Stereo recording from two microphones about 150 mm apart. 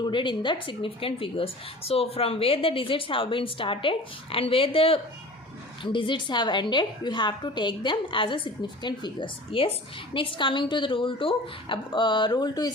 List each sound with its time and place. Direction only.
0.0 s a woman's voice: 30° left (ahead or behind)